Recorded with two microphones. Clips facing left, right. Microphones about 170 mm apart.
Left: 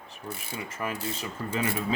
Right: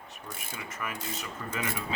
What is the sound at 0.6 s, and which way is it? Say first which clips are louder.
Rub: left 5 dB; 30° left (ahead or behind).